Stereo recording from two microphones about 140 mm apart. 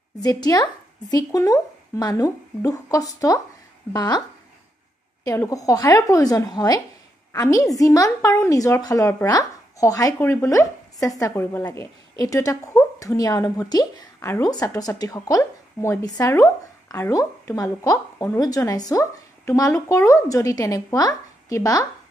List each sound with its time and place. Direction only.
0.2 s a woman's voice: 25° left (ahead or behind)
5.2 s a woman's voice: 25° left (ahead or behind)